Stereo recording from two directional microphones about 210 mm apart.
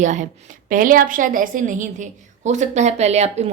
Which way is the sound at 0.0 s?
35° right (ahead or behind).